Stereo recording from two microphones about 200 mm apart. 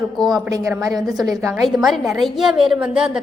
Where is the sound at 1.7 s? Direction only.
Centre (ahead or behind).